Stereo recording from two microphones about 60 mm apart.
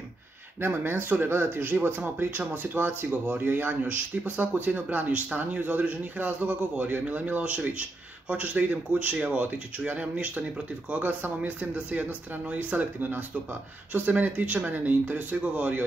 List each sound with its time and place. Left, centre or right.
0.6 s speech: right